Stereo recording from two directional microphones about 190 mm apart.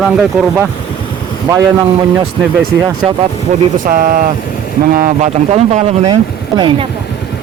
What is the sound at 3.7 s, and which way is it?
A man's voice, 45° right (ahead or behind).